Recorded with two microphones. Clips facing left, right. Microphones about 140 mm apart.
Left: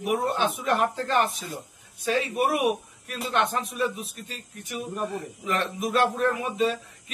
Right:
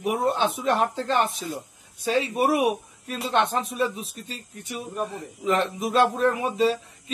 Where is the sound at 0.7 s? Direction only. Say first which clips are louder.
Right 2 dB; 30° right (ahead or behind).